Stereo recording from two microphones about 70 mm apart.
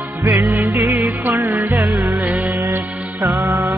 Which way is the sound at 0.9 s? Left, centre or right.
Right.